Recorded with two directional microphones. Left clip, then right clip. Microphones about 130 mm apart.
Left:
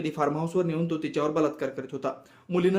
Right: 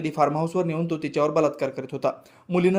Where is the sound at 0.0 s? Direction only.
40° right (ahead or behind).